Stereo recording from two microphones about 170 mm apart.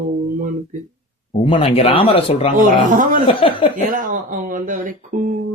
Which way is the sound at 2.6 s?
50° right (ahead or behind).